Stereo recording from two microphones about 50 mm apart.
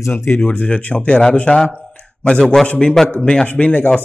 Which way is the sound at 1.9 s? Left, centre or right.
Left.